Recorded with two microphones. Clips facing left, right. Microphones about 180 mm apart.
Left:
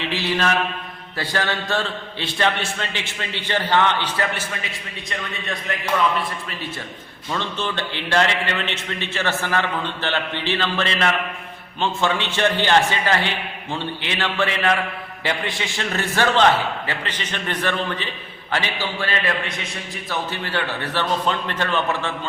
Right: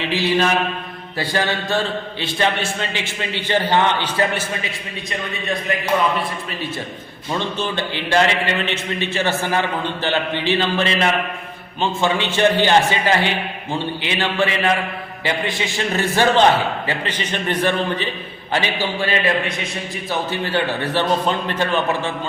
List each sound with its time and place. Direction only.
0.1 s a man's voice: 15° right (ahead or behind)
7.3 s a man's voice: 10° right (ahead or behind)
15.9 s a man's voice: 15° right (ahead or behind)
20.4 s a man's voice: 15° right (ahead or behind)